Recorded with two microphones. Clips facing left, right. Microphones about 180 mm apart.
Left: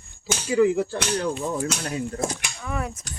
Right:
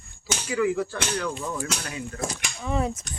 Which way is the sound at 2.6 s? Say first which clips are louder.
Right 5 dB; 25° right (ahead or behind).